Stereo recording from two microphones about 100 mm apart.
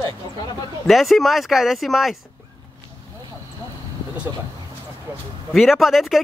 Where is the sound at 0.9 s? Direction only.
Centre (ahead or behind).